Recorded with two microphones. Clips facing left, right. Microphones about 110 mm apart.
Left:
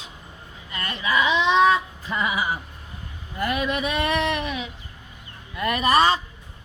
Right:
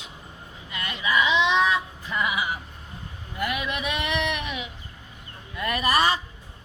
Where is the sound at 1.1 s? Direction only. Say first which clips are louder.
Left 2 dB; 40° left (ahead or behind).